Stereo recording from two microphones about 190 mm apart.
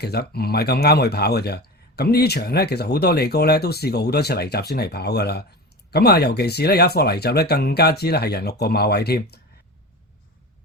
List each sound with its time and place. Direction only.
0.0 s speech: 55° left (ahead or behind)